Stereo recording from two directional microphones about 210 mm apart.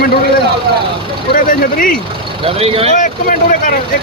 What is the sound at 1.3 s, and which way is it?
Speech, 40° left (ahead or behind).